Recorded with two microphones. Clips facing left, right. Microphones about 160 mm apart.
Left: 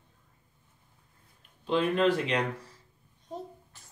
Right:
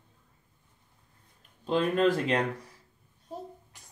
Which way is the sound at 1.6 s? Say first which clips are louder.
Even; 45° right (ahead or behind).